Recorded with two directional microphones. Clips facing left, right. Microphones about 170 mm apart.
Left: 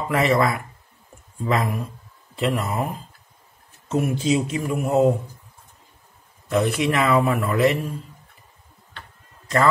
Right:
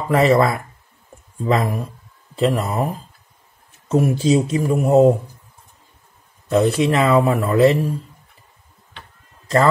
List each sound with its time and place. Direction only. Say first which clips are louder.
0.1 s speech: right 5 dB; 35° right (ahead or behind)
3.9 s speech: right 5 dB; 35° right (ahead or behind)
6.5 s speech: right 4 dB; 30° right (ahead or behind)